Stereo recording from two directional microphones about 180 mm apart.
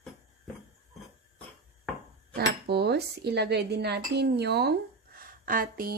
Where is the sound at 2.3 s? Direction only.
65° right (ahead or behind).